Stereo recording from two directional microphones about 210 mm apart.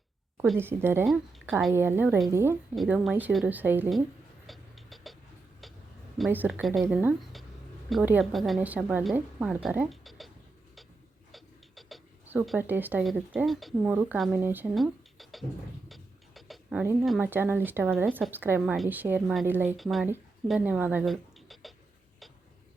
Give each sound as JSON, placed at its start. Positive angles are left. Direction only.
{"t": 0.6, "sound": "a woman's voice", "side_deg": -10}
{"t": 2.7, "sound": "a woman's voice", "side_deg": 0}
{"t": 4.4, "sound": "vehicle", "side_deg": 0}
{"t": 6.1, "sound": "a woman's voice", "side_deg": -5}